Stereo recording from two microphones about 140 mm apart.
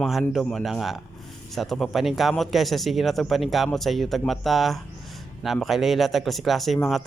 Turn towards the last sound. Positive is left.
turn(degrees=0)  # may be behind; listen again after turning